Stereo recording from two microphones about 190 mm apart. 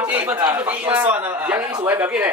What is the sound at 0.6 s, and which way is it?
A man's voice, 10° right (ahead or behind).